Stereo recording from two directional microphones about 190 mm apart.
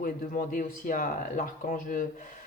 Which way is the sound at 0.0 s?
45° left (ahead or behind).